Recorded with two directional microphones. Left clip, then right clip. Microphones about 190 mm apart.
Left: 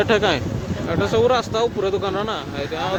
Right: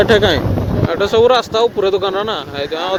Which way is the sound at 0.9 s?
25° right (ahead or behind).